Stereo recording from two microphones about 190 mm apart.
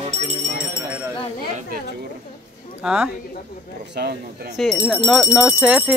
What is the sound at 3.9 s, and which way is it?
Speech, 55° right (ahead or behind).